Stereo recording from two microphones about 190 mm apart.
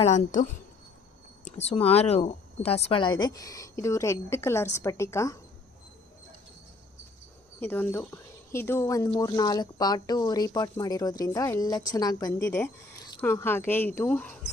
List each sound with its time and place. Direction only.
0.0 s a woman's voice: 40° left (ahead or behind); by 5.4 s 15° left (ahead or behind)
7.6 s a woman's voice: 10° left (ahead or behind)